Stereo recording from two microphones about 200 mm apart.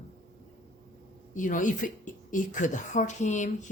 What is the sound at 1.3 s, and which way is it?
Speech, 40° left (ahead or behind).